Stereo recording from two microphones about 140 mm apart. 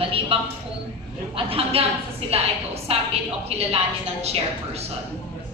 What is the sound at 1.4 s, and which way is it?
A woman's voice, 40° right (ahead or behind).